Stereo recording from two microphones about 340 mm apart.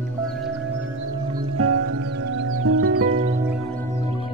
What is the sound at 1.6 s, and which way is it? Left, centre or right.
Music, right.